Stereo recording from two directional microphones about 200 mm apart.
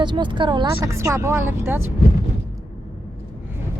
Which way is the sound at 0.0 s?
25° right (ahead or behind).